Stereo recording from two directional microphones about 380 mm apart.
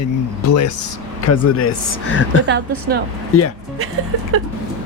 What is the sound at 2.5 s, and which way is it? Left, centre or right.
Speech, right.